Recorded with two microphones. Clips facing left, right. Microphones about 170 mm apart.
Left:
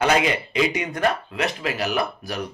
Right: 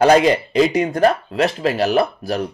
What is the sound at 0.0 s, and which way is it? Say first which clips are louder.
Speech: right 8 dB; 35° right (ahead or behind).